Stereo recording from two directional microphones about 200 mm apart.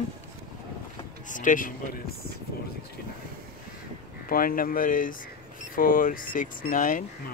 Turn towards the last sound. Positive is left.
turn(degrees=40)  # may be behind; listen again after turning